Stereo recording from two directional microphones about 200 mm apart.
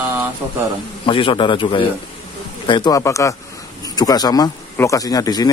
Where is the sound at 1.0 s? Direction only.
25° left (ahead or behind).